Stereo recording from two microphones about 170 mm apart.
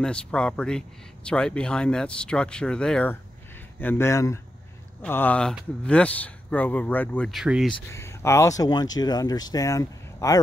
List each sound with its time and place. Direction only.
0.0 s speech: 5° left (ahead or behind)
7.9 s speech: 15° left (ahead or behind)